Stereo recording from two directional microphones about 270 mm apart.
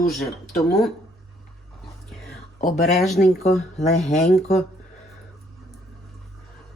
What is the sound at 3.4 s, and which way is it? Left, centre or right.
Speech, left.